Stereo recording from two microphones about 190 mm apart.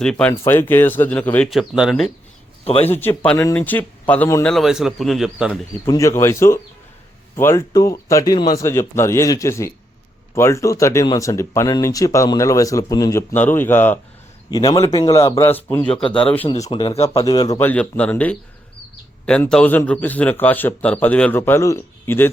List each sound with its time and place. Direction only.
0.0 s speech: 5° left (ahead or behind)
2.6 s speech: 35° left (ahead or behind)
2.9 s speech: 10° left (ahead or behind)
4.5 s speech: centre (ahead or behind)
5.8 s speech: 15° left (ahead or behind)
16.5 s speech: 20° left (ahead or behind)
17.6 s speech: 10° left (ahead or behind)